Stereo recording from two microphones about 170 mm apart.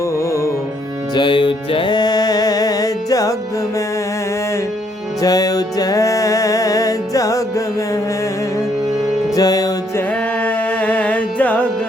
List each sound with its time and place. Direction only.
1.1 s music: 30° left (ahead or behind)
5.2 s music: 20° left (ahead or behind)
9.3 s music: 20° left (ahead or behind)
10.4 s music: 10° left (ahead or behind)